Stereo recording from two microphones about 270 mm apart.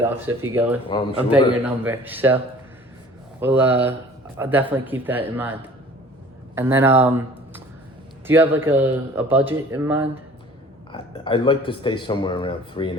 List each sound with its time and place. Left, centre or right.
0.4 s speech: centre
3.4 s speech: centre
6.6 s speech: centre
10.9 s a man's voice: centre